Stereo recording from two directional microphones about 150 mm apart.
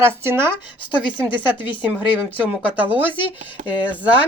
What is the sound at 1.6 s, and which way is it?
Speech, 35° left (ahead or behind).